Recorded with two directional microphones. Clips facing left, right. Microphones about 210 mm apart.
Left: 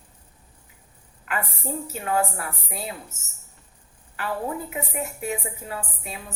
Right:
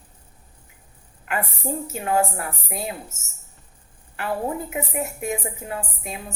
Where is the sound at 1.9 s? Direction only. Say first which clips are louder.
Right 2 dB; 40° right (ahead or behind).